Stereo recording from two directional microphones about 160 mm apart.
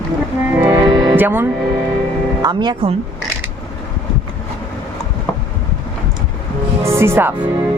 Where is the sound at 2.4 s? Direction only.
25° right (ahead or behind).